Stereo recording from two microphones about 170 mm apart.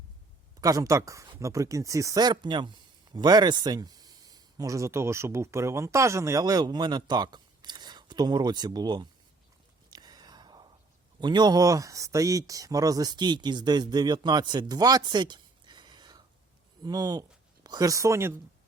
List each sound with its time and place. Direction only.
0.6 s speech: 20° right (ahead or behind)
9.9 s whispering: 25° right (ahead or behind)
11.2 s speech: 25° right (ahead or behind)